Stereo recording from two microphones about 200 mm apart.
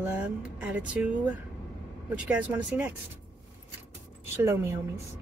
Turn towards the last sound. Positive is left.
turn(degrees=-15)  # may be behind; listen again after turning